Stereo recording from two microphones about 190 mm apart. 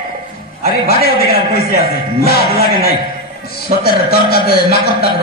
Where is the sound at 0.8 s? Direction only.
55° left (ahead or behind).